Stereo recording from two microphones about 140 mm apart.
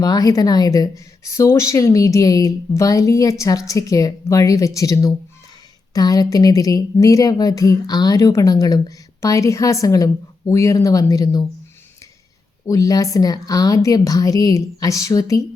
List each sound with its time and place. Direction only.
0.0 s a woman's voice: 25° left (ahead or behind)
12.6 s a woman's voice: 25° left (ahead or behind)